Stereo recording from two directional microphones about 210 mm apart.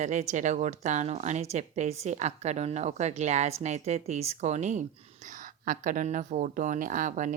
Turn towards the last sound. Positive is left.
turn(degrees=-40)  # may be behind; listen again after turning